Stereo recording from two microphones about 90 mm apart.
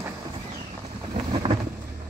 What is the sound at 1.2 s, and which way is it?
Boat, 90° right.